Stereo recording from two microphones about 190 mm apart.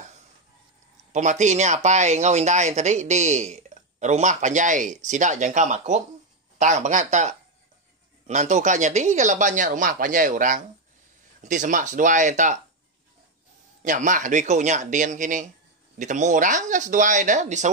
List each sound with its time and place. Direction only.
1.1 s speech: 40° right (ahead or behind)
13.8 s speech: 40° right (ahead or behind)